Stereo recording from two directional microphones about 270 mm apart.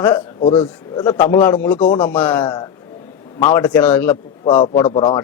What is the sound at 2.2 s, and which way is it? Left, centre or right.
Speech, centre.